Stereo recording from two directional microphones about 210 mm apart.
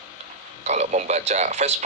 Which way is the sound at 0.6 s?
35° right (ahead or behind).